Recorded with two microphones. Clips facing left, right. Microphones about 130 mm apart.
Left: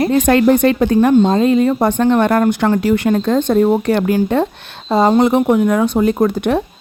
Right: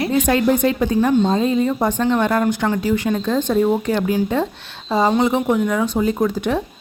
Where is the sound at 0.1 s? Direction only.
65° left (ahead or behind).